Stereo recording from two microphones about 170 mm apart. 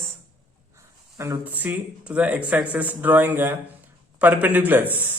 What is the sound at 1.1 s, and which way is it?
A man's voice, 20° right (ahead or behind).